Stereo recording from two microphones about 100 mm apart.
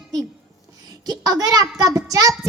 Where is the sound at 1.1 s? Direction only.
40° right (ahead or behind).